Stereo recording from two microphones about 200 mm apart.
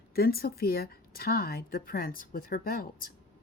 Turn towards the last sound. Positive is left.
turn(degrees=45)  # may be behind; listen again after turning